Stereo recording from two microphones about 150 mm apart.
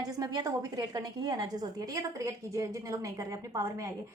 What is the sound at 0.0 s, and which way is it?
A woman's voice, 25° right (ahead or behind).